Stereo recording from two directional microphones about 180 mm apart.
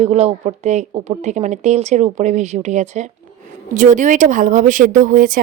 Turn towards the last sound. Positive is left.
turn(degrees=-50)  # may be behind; listen again after turning